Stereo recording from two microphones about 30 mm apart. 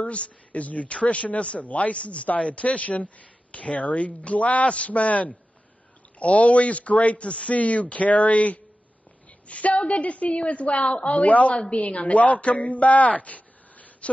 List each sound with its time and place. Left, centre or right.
0.0 s speech: left
1.6 s a woman's voice: left
7.5 s a woman's voice: left